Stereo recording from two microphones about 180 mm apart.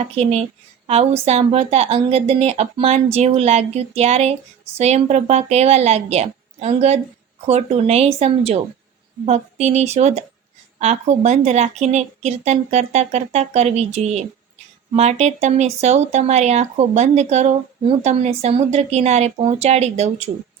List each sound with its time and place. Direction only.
0.0 s speech: 35° right (ahead or behind)